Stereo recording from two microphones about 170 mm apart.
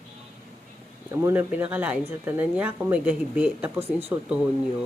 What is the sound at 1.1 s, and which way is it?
A woman's voice, 15° right (ahead or behind).